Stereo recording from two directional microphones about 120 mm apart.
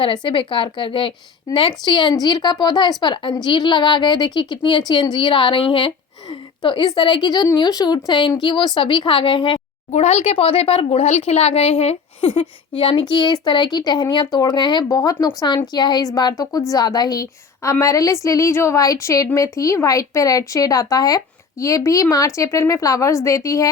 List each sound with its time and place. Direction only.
0.0 s a woman's voice: 40° left (ahead or behind)
9.9 s a woman's voice: 70° left (ahead or behind); by 23.6 s 25° left (ahead or behind)